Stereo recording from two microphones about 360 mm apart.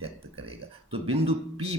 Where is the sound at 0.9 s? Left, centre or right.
Centre.